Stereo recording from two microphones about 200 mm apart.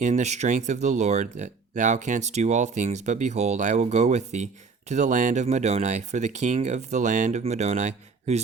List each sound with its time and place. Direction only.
0.0 s speech: 35° right (ahead or behind)